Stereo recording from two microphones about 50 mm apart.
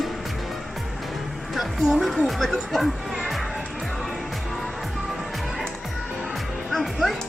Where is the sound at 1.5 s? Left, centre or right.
Centre.